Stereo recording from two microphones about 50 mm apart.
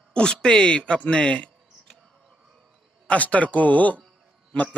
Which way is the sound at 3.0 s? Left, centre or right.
Left.